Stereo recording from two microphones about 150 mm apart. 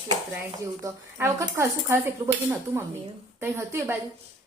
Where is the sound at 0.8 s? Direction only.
20° right (ahead or behind).